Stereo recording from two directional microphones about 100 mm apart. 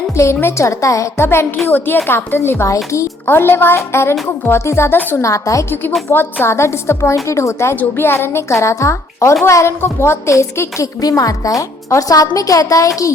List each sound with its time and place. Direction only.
0.3 s a woman's voice: 25° left (ahead or behind)
5.2 s a woman's voice: 30° left (ahead or behind)
6.1 s a woman's voice: 20° left (ahead or behind)